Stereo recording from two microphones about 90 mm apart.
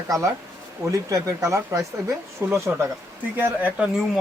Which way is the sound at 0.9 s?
35° right (ahead or behind).